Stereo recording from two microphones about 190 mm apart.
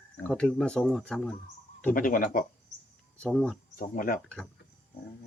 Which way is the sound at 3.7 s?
45° left (ahead or behind).